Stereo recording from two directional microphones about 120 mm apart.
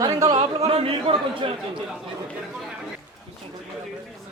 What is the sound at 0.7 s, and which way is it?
Speech, 50° right (ahead or behind).